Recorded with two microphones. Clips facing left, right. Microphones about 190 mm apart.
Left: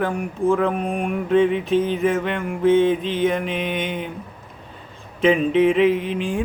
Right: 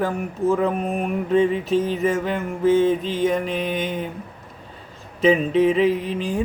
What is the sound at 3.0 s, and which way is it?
Music, 40° right (ahead or behind).